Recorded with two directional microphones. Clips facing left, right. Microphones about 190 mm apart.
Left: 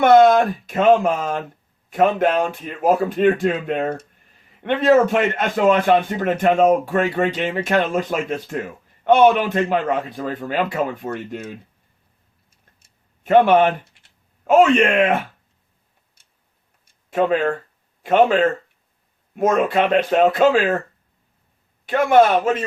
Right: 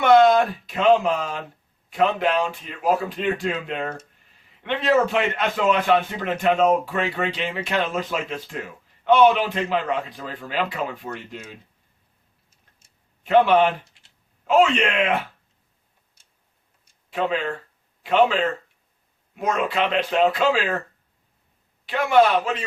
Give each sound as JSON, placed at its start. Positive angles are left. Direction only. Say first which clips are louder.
{"t": 0.0, "sound": "a man's voice", "louder": "left 3 dB", "side_deg": 45}
{"t": 12.8, "sound": "a sound", "louder": "left 4 dB", "side_deg": 50}
{"t": 14.4, "sound": "a man's voice", "louder": "left 5 dB", "side_deg": 50}
{"t": 16.8, "sound": "a sound", "louder": "left 6 dB", "side_deg": 50}
{"t": 18.0, "sound": "a man's voice", "louder": "left 4 dB", "side_deg": 50}
{"t": 21.8, "sound": "a man's voice", "louder": "left 4 dB", "side_deg": 50}